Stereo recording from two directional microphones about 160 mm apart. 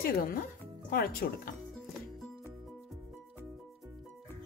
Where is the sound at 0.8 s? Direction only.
65° left (ahead or behind).